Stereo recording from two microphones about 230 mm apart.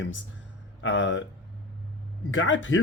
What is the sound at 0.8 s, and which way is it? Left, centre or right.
Speech, left.